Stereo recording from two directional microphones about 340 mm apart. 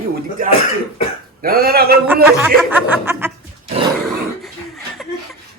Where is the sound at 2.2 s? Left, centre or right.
Centre.